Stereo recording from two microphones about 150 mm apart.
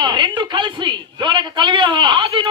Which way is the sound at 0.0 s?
30° right (ahead or behind).